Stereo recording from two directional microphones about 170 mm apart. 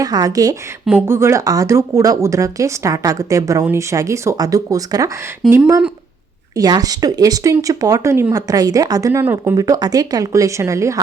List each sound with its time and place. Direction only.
0.0 s speech: 20° right (ahead or behind)